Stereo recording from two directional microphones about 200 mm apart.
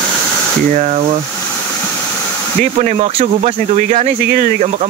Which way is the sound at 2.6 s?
40° right (ahead or behind).